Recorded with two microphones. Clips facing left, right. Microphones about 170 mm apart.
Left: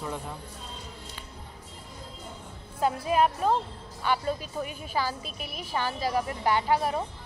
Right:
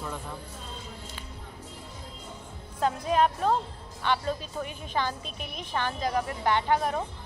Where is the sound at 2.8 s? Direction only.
5° left (ahead or behind).